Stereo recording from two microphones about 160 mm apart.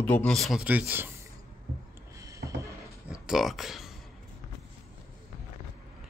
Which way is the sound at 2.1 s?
20° right (ahead or behind).